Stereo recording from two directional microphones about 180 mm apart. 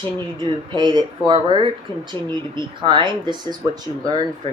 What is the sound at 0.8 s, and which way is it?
Speech, 25° right (ahead or behind).